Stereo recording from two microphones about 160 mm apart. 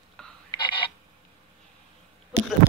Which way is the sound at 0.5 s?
30° left (ahead or behind).